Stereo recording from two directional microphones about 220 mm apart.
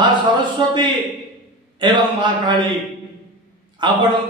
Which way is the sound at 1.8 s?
20° right (ahead or behind).